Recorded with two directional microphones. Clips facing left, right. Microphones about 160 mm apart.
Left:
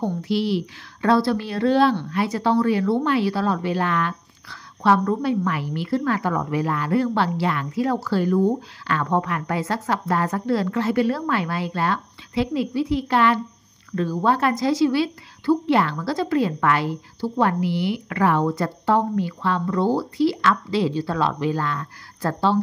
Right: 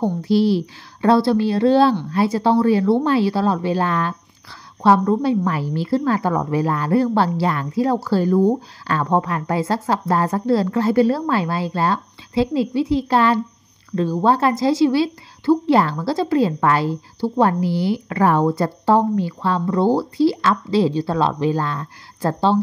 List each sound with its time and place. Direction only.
0.0 s speech: 35° right (ahead or behind)